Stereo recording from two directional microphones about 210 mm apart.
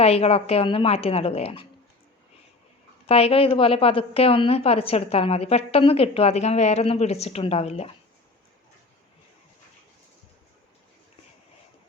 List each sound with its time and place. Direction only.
0.0 s a woman's voice: 30° left (ahead or behind)
3.1 s a woman's voice: 30° left (ahead or behind)